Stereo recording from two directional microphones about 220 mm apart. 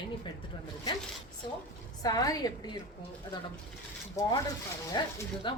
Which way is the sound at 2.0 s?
15° left (ahead or behind).